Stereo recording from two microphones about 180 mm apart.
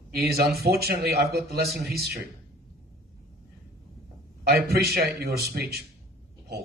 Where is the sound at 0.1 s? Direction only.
60° right (ahead or behind).